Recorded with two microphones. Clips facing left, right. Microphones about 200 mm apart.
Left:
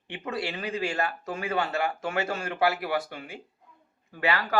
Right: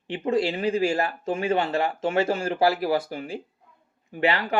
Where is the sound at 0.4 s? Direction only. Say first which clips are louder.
Right 7 dB; 25° right (ahead or behind).